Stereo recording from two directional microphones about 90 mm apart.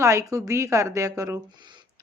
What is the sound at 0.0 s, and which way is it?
Speech, 35° right (ahead or behind).